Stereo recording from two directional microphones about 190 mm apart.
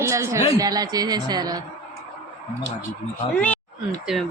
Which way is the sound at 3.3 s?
10° left (ahead or behind).